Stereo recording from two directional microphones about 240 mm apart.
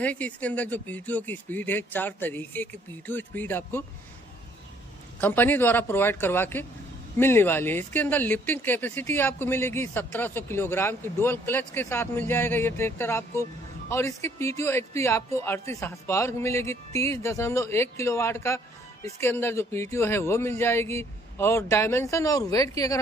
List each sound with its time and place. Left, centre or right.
0.0 s speech: centre
5.2 s speech: centre